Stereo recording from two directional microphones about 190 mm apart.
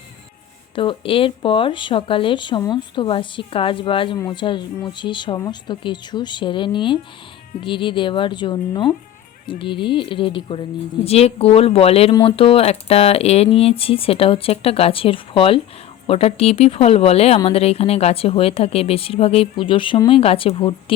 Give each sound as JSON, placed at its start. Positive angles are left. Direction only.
{"t": 0.8, "sound": "speech", "side_deg": 30}